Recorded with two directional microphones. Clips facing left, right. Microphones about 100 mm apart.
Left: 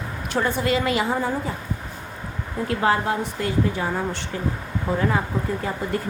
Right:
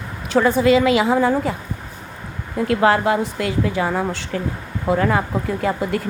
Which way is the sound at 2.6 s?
90° right.